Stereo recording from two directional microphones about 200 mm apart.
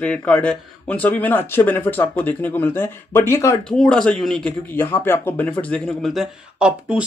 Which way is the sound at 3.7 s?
Centre (ahead or behind).